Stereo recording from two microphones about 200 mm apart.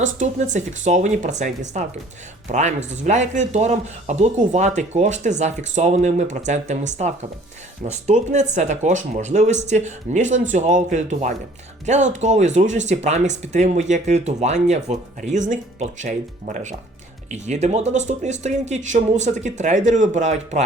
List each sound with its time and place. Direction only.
0.0 s speech: 40° right (ahead or behind)